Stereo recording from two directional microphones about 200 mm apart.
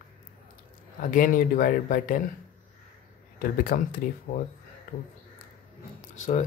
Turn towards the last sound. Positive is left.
turn(degrees=35)  # may be behind; listen again after turning